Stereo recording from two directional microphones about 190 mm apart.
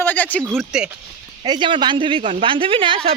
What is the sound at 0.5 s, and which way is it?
Speech, 5° right (ahead or behind).